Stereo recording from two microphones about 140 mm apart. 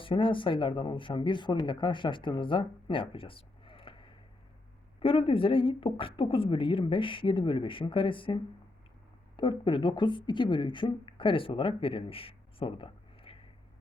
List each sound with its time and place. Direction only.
0.0 s speech: 40° left (ahead or behind)